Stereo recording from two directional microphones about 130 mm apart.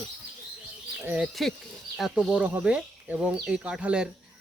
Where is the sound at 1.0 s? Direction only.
5° right (ahead or behind).